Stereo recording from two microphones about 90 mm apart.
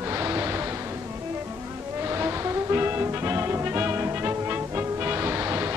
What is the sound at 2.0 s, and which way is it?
Music, 30° right (ahead or behind).